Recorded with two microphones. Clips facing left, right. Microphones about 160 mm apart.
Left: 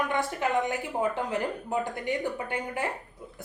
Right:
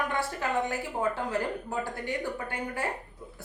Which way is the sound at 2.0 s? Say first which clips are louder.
Left 3 dB; 15° left (ahead or behind).